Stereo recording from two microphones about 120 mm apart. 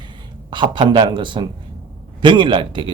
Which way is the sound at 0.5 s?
40° right (ahead or behind).